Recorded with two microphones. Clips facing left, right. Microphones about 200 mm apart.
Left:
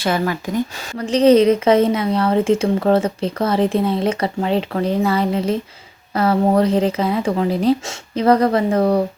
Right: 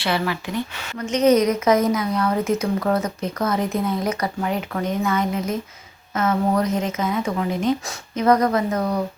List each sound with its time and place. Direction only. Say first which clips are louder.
0.0 s speech: left 4 dB; 45° left (ahead or behind)